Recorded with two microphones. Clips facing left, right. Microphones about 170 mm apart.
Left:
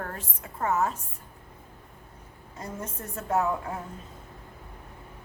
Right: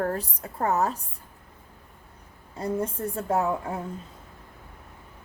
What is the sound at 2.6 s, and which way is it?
Speech, 30° right (ahead or behind).